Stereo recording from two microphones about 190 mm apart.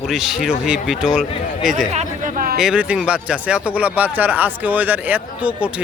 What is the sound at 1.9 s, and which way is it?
Chatter, 40° right (ahead or behind).